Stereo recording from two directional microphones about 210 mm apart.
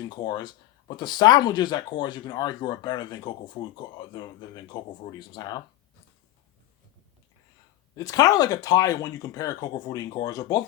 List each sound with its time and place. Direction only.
0.2 s speech: 20° left (ahead or behind)
7.9 s speech: 15° left (ahead or behind)